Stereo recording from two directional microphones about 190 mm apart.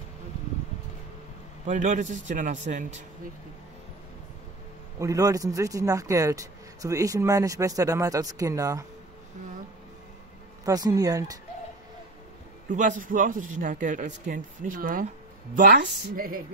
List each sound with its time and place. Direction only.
1.7 s a man's voice: 40° right (ahead or behind)
4.9 s a man's voice: 15° right (ahead or behind)
10.6 s speech: 20° right (ahead or behind)
12.6 s a man's voice: 45° right (ahead or behind)